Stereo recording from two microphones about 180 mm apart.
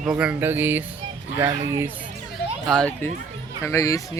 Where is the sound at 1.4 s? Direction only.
30° right (ahead or behind).